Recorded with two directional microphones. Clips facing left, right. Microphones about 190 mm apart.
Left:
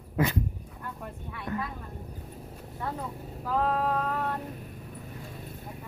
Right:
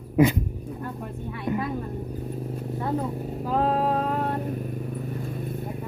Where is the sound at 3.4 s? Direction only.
25° right (ahead or behind).